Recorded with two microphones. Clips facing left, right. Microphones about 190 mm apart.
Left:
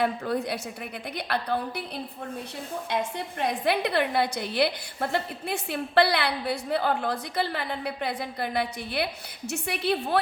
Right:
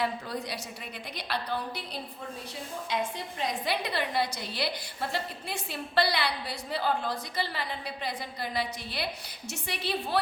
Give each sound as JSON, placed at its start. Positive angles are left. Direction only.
{"t": 0.0, "sound": "a woman's voice", "side_deg": 55}
{"t": 2.9, "sound": "a woman's voice", "side_deg": 60}